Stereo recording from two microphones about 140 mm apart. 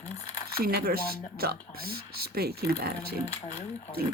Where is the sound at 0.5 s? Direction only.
90° right.